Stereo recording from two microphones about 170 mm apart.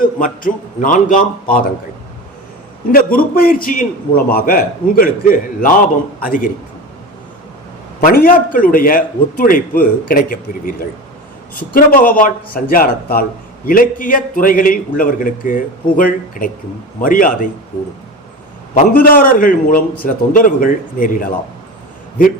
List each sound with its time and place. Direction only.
0.0 s a man's voice: 50° left (ahead or behind)
2.9 s a man's voice: 60° left (ahead or behind)
8.0 s a man's voice: 55° left (ahead or behind)
18.7 s a man's voice: 55° left (ahead or behind)